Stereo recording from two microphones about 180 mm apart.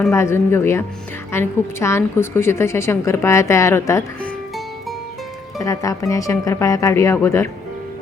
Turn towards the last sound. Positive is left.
turn(degrees=15)  # may be behind; listen again after turning